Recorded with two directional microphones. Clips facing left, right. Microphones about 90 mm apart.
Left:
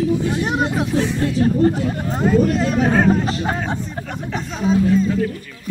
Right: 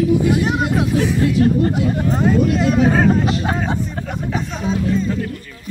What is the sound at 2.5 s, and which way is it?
Speech, centre (ahead or behind).